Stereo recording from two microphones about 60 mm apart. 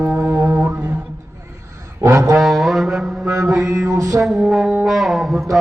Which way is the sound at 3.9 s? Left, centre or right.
Right.